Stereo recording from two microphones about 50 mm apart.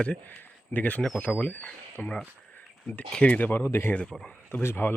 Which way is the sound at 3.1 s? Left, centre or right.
Left.